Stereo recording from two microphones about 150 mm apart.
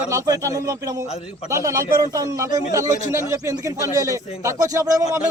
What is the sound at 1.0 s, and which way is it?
Speech, 45° left (ahead or behind).